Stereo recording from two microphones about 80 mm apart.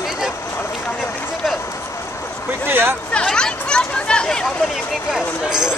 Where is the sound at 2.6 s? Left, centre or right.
Right.